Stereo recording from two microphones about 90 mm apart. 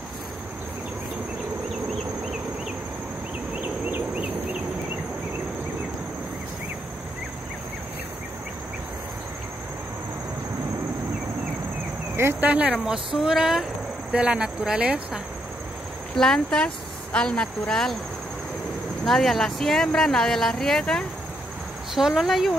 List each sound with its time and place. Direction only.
3.6 s a sound: 20° right (ahead or behind)
12.2 s speech: 25° right (ahead or behind)
16.2 s speech: 10° left (ahead or behind)
19.0 s speech: 5° left (ahead or behind)
21.9 s speech: 5° right (ahead or behind)